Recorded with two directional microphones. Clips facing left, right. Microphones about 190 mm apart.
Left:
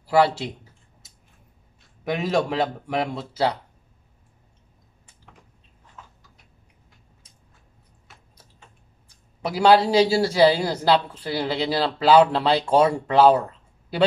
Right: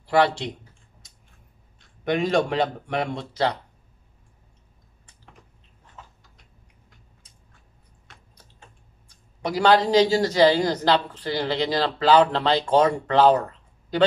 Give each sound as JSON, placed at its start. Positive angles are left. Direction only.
{"t": 0.0, "sound": "speech", "side_deg": 5}
{"t": 2.0, "sound": "speech", "side_deg": 5}
{"t": 9.4, "sound": "speech", "side_deg": 5}